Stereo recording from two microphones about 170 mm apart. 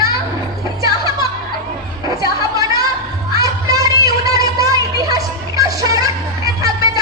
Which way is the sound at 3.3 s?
20° right (ahead or behind).